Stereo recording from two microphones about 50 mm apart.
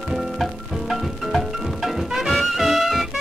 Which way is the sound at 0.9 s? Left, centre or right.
Centre.